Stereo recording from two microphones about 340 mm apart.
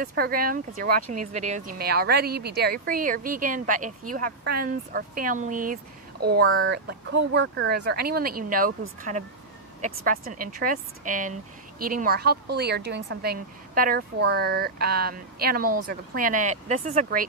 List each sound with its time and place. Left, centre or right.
0.0 s speech: right